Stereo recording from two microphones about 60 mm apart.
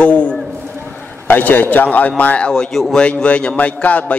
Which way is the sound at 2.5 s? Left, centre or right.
Centre.